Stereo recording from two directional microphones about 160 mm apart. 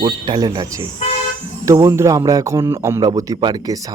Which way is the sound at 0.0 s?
25° right (ahead or behind).